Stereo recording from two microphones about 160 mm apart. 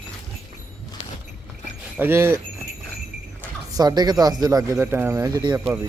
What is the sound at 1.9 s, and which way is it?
Speech, 15° right (ahead or behind).